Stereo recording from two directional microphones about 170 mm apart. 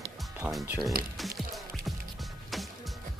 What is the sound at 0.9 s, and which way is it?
Speech, 60° right (ahead or behind).